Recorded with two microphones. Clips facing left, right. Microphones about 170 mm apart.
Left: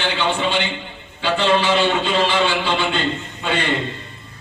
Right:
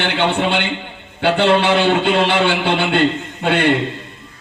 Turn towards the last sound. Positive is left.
turn(degrees=-60)  # may be behind; listen again after turning